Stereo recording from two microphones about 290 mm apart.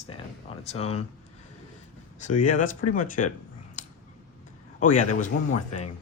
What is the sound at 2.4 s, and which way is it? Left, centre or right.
Speech, left.